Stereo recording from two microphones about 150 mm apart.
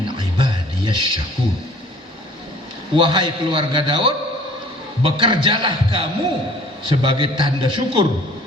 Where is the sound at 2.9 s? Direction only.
35° right (ahead or behind).